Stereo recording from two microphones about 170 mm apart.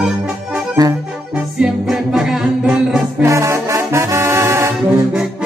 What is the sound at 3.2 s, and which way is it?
Brass instrument, 15° right (ahead or behind).